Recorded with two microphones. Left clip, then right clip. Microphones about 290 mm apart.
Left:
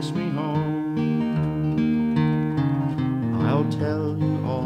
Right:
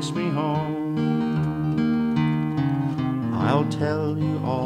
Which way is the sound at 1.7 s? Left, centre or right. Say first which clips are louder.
Even; centre.